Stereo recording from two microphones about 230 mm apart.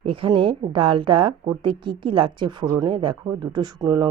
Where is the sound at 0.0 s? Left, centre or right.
Right.